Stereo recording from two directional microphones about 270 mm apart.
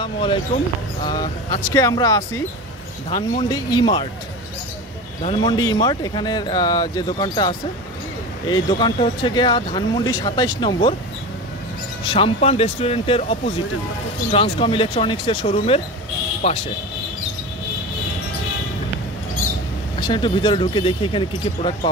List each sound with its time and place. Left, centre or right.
0.0 s speech: centre
5.2 s speech: centre
12.0 s speech: centre
20.0 s speech: centre